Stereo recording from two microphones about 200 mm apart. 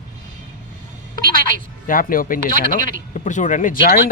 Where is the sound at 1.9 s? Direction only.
45° left (ahead or behind).